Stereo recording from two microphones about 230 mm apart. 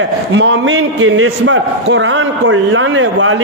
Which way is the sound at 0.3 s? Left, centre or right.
Right.